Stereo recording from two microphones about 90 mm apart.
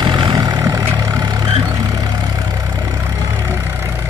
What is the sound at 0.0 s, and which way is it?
Vehicle, 60° right (ahead or behind).